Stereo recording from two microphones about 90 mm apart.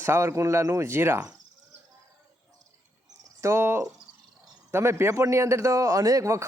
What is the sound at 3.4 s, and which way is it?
A man's voice, 30° right (ahead or behind).